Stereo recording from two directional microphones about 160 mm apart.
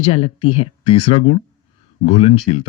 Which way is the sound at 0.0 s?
35° left (ahead or behind).